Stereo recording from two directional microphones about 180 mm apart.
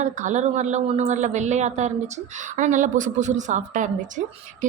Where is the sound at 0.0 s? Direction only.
45° right (ahead or behind).